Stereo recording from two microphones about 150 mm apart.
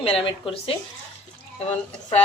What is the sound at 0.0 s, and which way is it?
Speech, 40° left (ahead or behind).